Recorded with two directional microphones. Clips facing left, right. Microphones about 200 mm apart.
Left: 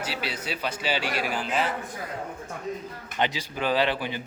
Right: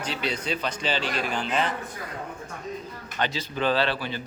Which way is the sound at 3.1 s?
15° left (ahead or behind).